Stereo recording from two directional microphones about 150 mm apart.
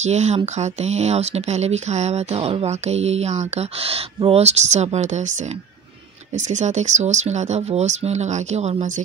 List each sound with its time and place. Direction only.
0.0 s speech: 50° right (ahead or behind)
6.3 s speech: 55° right (ahead or behind)